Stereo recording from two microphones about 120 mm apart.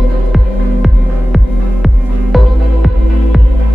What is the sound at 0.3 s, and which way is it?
Music, centre (ahead or behind).